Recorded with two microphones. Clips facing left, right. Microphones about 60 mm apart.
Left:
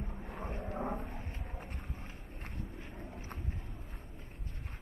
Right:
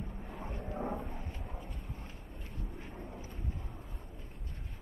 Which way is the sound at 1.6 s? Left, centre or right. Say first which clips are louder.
Left 1 dB; left.